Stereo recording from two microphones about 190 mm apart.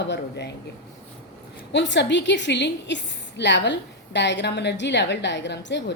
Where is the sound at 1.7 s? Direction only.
65° left (ahead or behind).